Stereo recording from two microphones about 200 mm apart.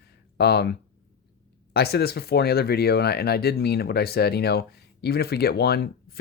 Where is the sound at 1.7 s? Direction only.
50° left (ahead or behind).